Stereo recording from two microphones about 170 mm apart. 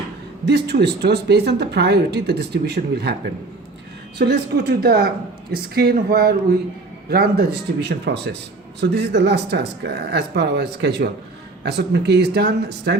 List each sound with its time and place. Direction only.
0.4 s speech: 75° right (ahead or behind)
4.2 s speech: 70° right (ahead or behind)